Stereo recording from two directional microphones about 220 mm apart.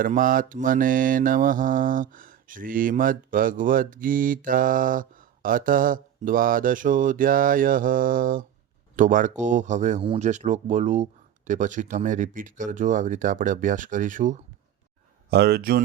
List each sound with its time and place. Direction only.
0.0 s mantra: 40° right (ahead or behind)
15.3 s speech: 45° right (ahead or behind)